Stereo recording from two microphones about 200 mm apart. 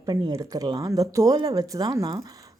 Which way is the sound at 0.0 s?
20° right (ahead or behind).